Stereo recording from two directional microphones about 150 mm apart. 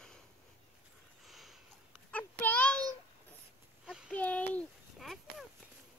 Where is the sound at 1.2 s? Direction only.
Centre (ahead or behind).